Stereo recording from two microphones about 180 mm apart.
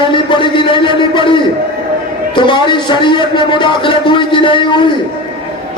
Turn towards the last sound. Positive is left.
turn(degrees=25)  # may be behind; listen again after turning